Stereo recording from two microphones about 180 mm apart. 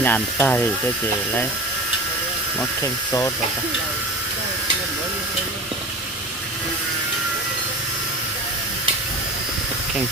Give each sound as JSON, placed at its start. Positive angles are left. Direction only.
{"t": 0.0, "sound": "speech", "side_deg": 10}
{"t": 2.6, "sound": "speech", "side_deg": 15}